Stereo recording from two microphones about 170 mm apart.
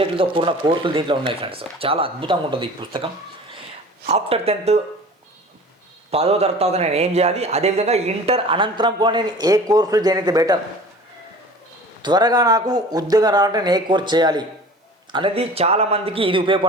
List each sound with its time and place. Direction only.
0.0 s a man's voice: 30° right (ahead or behind)
4.1 s a man's voice: 35° right (ahead or behind)
6.1 s a man's voice: 35° right (ahead or behind)
12.0 s a man's voice: 25° right (ahead or behind)